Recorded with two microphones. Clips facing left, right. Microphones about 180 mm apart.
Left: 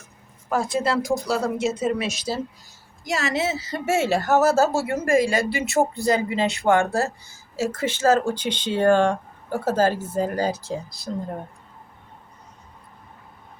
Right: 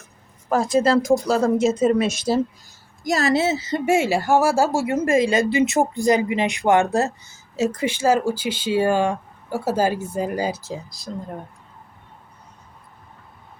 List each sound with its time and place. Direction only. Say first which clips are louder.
0.5 s a woman's voice: right 5 dB; 40° right (ahead or behind)
3.0 s speech: right 5 dB; 40° right (ahead or behind); by 10.9 s 5° right (ahead or behind)